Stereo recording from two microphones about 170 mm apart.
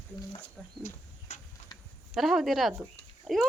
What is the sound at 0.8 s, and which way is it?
Cricket, 45° left (ahead or behind).